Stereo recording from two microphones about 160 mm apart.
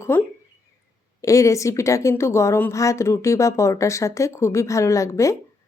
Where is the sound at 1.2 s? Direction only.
20° left (ahead or behind).